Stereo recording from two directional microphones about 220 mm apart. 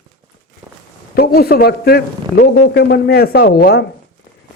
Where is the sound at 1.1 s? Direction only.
45° left (ahead or behind).